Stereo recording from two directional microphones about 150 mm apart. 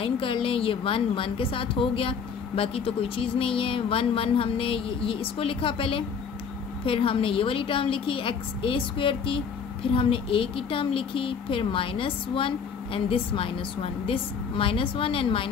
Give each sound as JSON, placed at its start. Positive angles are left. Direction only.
{"t": 0.0, "sound": "a woman's voice", "side_deg": 35}